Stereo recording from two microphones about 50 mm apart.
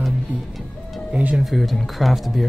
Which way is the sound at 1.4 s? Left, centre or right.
Centre.